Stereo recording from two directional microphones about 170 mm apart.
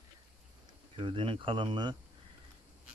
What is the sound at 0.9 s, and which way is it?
Speech, 30° right (ahead or behind).